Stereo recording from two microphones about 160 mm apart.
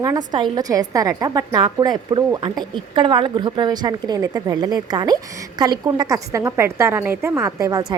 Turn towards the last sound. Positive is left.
turn(degrees=-20)  # may be behind; listen again after turning